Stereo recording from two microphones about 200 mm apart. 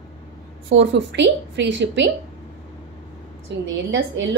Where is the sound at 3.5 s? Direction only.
60° right (ahead or behind).